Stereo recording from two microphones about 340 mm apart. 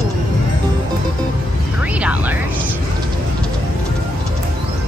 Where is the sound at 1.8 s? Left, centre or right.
Centre.